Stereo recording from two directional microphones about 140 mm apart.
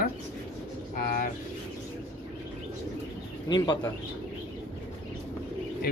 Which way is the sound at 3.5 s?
30° left (ahead or behind).